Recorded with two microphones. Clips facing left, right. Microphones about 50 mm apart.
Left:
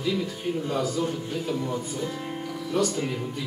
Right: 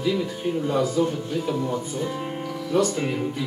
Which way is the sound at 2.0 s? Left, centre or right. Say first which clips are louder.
Right 3 dB; right.